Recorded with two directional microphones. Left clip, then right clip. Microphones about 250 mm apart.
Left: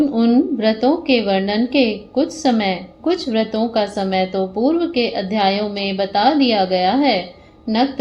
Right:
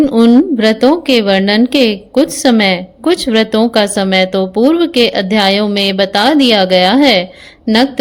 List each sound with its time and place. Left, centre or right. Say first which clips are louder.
0.1 s a woman's voice: right 8 dB; right